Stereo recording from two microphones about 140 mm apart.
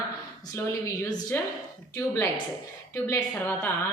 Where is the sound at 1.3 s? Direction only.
15° left (ahead or behind).